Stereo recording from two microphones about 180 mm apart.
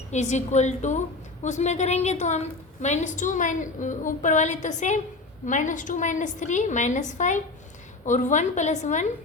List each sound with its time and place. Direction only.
0.1 s a woman's voice: 40° left (ahead or behind)